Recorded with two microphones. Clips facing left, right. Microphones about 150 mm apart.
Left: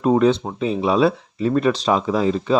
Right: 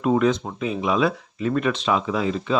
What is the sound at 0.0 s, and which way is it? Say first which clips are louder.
Speech: left 4 dB; 35° left (ahead or behind).